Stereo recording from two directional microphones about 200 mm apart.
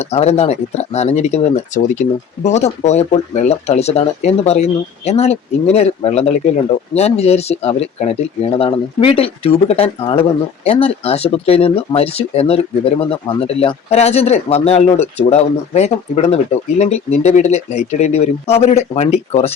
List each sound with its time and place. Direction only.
0.1 s speech: 30° left (ahead or behind)